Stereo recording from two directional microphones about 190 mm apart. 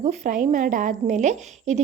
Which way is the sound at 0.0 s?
35° right (ahead or behind).